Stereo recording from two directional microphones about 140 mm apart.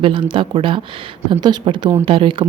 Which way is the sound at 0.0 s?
35° right (ahead or behind).